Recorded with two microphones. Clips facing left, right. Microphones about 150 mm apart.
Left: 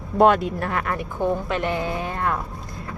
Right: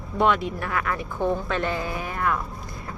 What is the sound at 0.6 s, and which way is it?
Speech, 30° left (ahead or behind).